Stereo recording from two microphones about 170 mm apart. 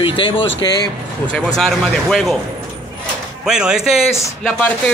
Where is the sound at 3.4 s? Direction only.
5° right (ahead or behind).